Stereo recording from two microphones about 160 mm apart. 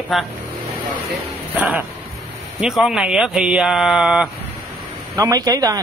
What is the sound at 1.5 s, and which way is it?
Speech, 10° right (ahead or behind).